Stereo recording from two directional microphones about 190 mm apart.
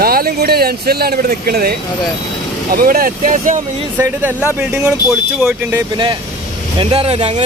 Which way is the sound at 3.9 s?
10° right (ahead or behind).